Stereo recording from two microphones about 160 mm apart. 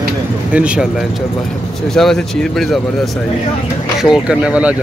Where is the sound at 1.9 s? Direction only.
Centre (ahead or behind).